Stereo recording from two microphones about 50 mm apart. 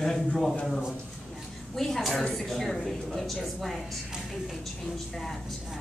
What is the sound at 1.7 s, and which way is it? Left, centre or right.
Speech, centre.